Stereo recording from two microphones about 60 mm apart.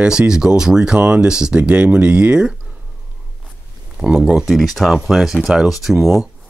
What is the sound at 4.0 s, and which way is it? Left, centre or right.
Speech, centre.